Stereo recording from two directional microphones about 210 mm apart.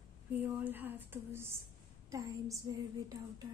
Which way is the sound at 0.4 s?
10° right (ahead or behind).